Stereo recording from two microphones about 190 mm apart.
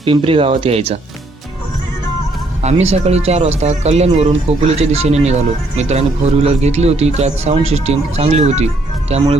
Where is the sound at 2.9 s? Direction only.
35° right (ahead or behind).